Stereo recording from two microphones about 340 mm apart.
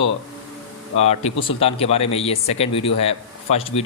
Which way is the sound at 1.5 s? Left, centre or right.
Centre.